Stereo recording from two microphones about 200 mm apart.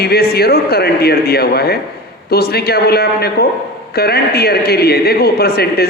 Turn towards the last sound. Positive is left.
turn(degrees=50)  # may be behind; listen again after turning